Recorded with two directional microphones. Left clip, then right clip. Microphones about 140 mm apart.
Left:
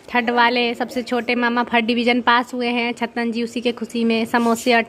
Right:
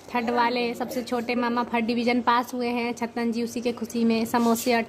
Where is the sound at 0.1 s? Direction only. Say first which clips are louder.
Left 7 dB; 20° left (ahead or behind).